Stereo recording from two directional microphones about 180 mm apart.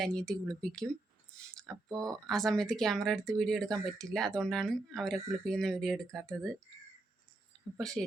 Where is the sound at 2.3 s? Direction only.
Centre (ahead or behind).